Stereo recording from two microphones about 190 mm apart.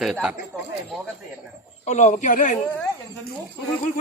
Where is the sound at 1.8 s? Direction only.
40° left (ahead or behind).